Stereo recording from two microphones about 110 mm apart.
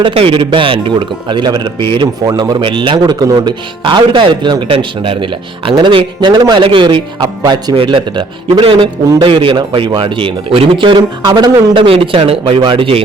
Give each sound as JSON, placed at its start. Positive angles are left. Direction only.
{"t": 0.0, "sound": "speech", "side_deg": -55}
{"t": 3.0, "sound": "speech", "side_deg": -30}
{"t": 3.8, "sound": "speech", "side_deg": -45}